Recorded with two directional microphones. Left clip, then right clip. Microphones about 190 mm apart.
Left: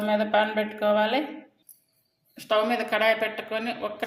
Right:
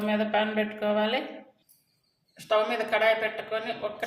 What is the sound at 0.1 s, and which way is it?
Speech, 25° left (ahead or behind).